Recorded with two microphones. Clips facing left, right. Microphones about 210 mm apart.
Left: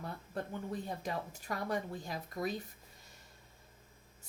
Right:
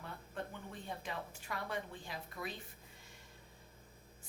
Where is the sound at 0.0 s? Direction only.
40° left (ahead or behind).